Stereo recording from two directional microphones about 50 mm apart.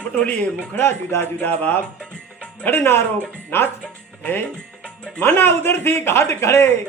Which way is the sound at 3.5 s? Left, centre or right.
Left.